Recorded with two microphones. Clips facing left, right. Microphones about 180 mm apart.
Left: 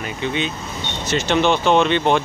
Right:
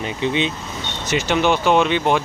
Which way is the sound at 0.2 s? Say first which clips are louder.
Right 3 dB; 25° right (ahead or behind).